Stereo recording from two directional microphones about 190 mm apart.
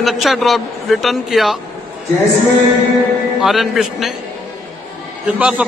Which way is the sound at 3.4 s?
Centre (ahead or behind).